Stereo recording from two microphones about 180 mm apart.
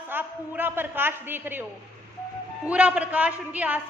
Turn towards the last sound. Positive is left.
turn(degrees=-10)  # may be behind; listen again after turning